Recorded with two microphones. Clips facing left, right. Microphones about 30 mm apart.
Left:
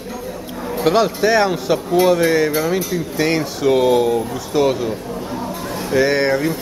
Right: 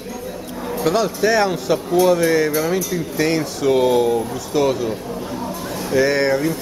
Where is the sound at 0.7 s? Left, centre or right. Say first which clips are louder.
Left 3 dB; left.